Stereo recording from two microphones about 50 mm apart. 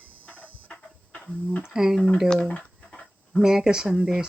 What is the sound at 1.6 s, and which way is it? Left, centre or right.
Speech, centre.